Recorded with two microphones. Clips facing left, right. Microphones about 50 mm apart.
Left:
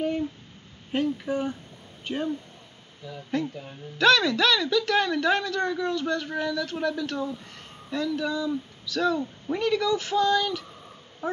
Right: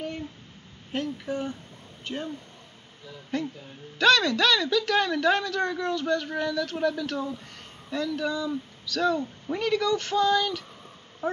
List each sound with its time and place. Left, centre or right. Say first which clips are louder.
0.9 s a man's voice: left 4 dB; centre